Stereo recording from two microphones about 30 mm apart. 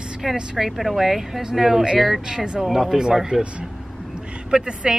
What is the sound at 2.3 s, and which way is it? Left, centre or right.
Speech, right.